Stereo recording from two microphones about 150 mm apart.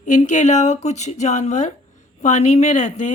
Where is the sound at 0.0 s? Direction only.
55° left (ahead or behind).